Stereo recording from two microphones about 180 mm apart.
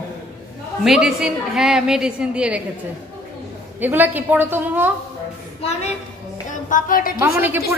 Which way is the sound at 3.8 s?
10° right (ahead or behind).